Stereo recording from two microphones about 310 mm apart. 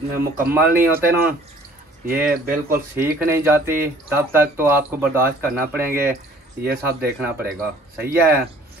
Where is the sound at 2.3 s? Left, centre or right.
Right.